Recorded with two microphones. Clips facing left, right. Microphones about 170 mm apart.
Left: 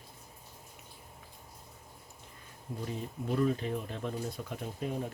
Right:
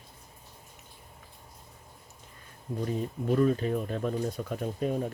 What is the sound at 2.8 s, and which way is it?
Speech, 50° right (ahead or behind).